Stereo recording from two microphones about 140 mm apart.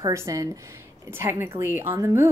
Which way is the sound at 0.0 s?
20° right (ahead or behind).